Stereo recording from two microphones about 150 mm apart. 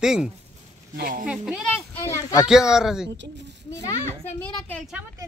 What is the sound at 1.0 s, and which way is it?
Speech, 70° right (ahead or behind).